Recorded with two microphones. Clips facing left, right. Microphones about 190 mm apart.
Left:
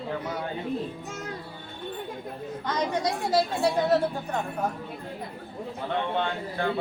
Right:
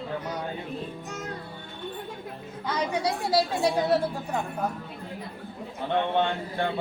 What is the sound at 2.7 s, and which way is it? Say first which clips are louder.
A woman's voice: even; 10° right (ahead or behind).